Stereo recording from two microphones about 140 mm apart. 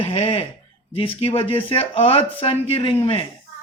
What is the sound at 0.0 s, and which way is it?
Speech, 40° left (ahead or behind).